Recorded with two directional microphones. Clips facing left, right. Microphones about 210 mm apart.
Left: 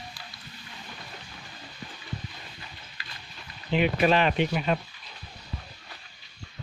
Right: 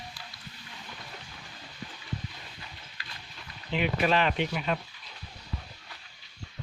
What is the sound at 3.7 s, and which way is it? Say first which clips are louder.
Speech: left 4 dB; 20° left (ahead or behind).